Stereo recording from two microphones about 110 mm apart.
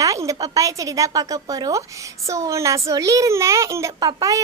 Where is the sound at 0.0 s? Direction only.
30° right (ahead or behind).